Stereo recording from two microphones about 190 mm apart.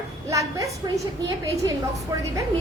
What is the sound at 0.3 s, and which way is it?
Speech, 15° right (ahead or behind).